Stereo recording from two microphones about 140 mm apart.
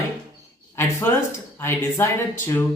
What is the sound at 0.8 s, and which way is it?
Speech, 15° left (ahead or behind).